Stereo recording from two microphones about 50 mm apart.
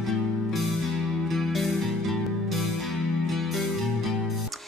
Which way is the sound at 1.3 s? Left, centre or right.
Centre.